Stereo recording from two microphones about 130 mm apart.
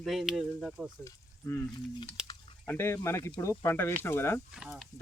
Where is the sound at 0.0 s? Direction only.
Centre (ahead or behind).